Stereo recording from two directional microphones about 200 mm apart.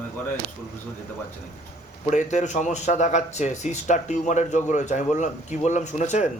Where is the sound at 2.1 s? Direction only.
35° left (ahead or behind).